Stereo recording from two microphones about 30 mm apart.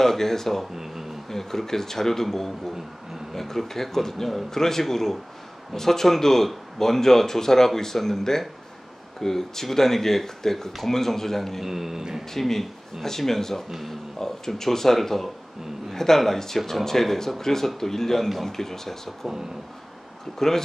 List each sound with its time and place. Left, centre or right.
0.0 s speech: centre
0.7 s speech: centre
1.3 s speech: centre
11.6 s a sound: centre
12.0 s speech: centre
12.4 s speech: centre
20.3 s speech: centre